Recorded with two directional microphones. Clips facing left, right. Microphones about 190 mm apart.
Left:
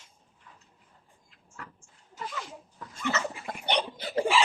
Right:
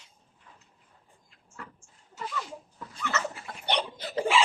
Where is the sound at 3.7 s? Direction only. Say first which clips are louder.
Left 1 dB; 15° left (ahead or behind).